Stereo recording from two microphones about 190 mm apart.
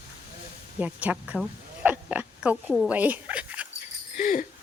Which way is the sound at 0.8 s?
5° right (ahead or behind).